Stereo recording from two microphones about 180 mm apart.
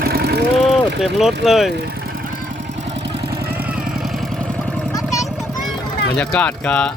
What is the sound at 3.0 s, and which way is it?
Vehicle, 60° right (ahead or behind).